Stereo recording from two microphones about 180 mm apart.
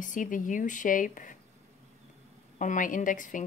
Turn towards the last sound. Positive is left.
turn(degrees=45)  # may be behind; listen again after turning